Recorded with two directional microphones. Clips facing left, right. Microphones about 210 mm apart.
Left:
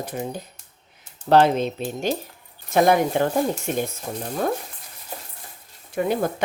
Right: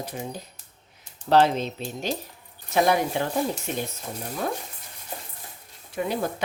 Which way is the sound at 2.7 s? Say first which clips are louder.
Left 4 dB; 50° left (ahead or behind).